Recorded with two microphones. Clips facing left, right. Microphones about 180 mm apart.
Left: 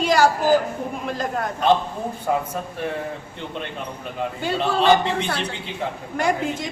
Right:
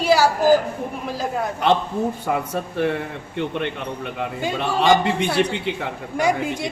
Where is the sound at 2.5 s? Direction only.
70° right (ahead or behind).